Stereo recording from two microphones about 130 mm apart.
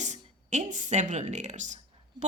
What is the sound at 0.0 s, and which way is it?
Speech, 65° right (ahead or behind).